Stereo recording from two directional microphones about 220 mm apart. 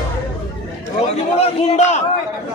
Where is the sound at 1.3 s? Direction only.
30° left (ahead or behind).